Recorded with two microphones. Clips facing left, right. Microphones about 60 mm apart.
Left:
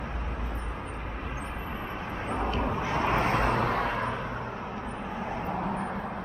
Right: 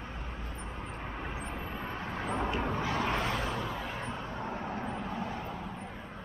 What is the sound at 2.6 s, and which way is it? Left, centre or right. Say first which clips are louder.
Vehicle: left 4 dB; left.